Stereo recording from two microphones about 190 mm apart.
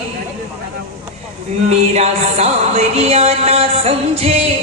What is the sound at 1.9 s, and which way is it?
Music, 35° right (ahead or behind).